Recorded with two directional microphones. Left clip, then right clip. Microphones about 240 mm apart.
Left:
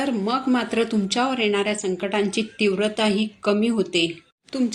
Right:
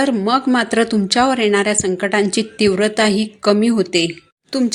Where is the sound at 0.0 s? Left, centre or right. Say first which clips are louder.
Right 8 dB; right.